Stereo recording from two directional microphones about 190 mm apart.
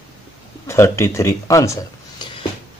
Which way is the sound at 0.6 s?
15° left (ahead or behind).